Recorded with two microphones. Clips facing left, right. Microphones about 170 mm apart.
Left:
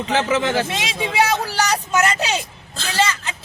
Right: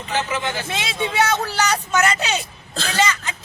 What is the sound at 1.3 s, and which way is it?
Speech, 35° left (ahead or behind).